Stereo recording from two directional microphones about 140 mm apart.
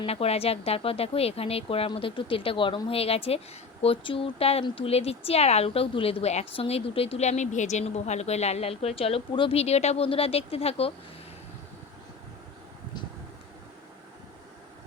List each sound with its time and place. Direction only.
0.0 s speech: 45° left (ahead or behind)